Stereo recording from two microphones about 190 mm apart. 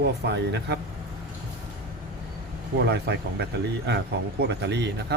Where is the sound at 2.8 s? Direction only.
60° right (ahead or behind).